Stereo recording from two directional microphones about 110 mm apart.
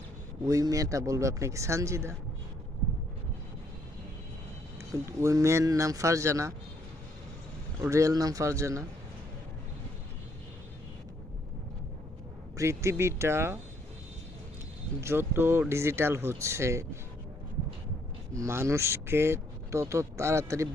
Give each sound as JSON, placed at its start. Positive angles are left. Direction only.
{"t": 0.4, "sound": "speech", "side_deg": -30}
{"t": 4.9, "sound": "speech", "side_deg": -30}
{"t": 7.8, "sound": "speech", "side_deg": -30}
{"t": 12.5, "sound": "speech", "side_deg": -25}
{"t": 15.0, "sound": "speech", "side_deg": -20}
{"t": 18.3, "sound": "speech", "side_deg": -25}